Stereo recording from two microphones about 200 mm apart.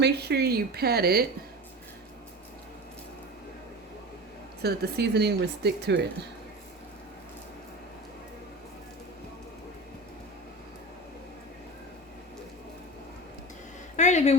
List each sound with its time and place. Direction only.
0.0 s speech: 55° right (ahead or behind)
4.6 s speech: 55° right (ahead or behind)
13.9 s speech: 35° left (ahead or behind)